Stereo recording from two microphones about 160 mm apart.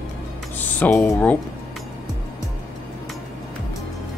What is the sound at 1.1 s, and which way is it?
Speech, 10° left (ahead or behind).